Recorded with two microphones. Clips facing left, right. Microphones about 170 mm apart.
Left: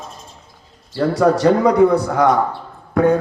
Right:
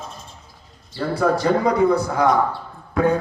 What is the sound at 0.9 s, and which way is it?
A man's voice, 85° left.